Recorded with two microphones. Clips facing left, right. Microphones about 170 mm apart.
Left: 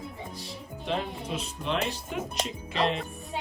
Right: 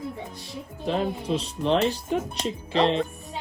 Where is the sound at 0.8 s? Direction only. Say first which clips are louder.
Right 6 dB; 35° right (ahead or behind).